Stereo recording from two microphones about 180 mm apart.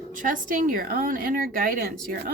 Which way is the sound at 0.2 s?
50° right (ahead or behind).